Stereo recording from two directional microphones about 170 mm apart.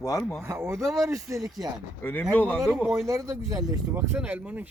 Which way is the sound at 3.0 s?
20° right (ahead or behind).